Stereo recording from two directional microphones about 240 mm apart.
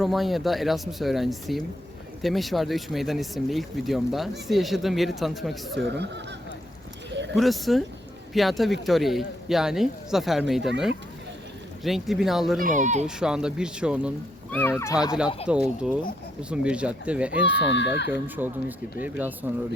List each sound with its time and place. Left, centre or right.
0.0 s speech: centre
5.7 s speech: right
7.3 s speech: centre
12.6 s speech: right
13.1 s speech: centre
14.5 s speech: centre
15.4 s speech: centre
17.4 s speech: left
18.1 s speech: centre